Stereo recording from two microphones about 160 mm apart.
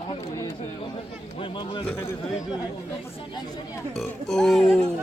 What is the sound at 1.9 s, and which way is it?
Speech, 15° left (ahead or behind).